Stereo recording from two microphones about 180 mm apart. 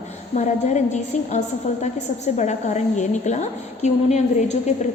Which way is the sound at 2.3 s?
40° left (ahead or behind).